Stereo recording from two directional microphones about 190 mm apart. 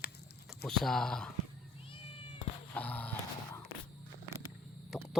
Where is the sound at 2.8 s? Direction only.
10° left (ahead or behind).